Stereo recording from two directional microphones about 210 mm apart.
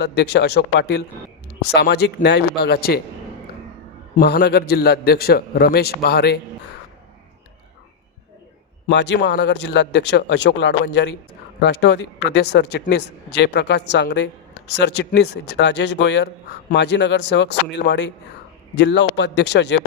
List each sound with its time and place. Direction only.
0.0 s a man's voice: 50° left (ahead or behind)
4.2 s a man's voice: 50° left (ahead or behind)
8.9 s a man's voice: 55° left (ahead or behind)